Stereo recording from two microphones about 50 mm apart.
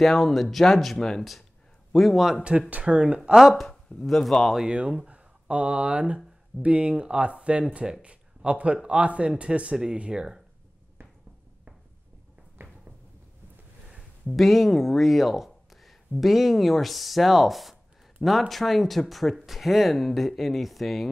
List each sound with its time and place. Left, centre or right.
0.0 s speech: centre
2.9 s speech: right
3.3 s speech: centre
3.6 s speech: centre
4.6 s speech: centre
12.6 s a sound: right
14.3 s speech: centre